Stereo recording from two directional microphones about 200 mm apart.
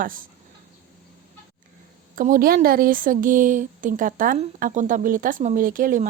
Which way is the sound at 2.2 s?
45° right (ahead or behind).